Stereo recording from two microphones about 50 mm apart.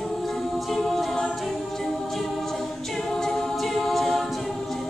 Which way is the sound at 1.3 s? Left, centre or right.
Centre.